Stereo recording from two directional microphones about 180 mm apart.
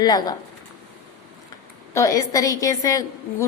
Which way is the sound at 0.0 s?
20° left (ahead or behind).